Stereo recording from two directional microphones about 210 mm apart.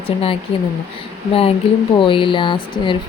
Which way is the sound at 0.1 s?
25° left (ahead or behind).